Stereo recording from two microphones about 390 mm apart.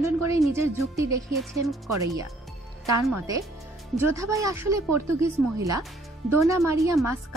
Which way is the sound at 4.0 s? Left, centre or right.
Centre.